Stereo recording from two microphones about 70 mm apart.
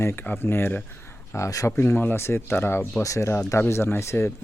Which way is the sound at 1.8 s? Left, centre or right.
Left.